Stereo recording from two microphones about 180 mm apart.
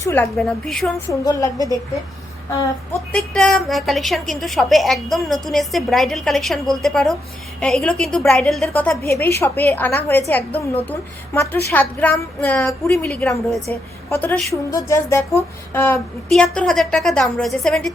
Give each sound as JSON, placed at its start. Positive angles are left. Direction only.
{"t": 0.0, "sound": "a woman's voice", "side_deg": 10}
{"t": 1.2, "sound": "a woman's voice", "side_deg": 20}
{"t": 3.1, "sound": "a woman's voice", "side_deg": 5}
{"t": 15.7, "sound": "a sound", "side_deg": 10}
{"t": 16.3, "sound": "a woman's voice", "side_deg": 5}